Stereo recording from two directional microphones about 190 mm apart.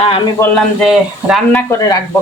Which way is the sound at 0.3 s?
10° left (ahead or behind).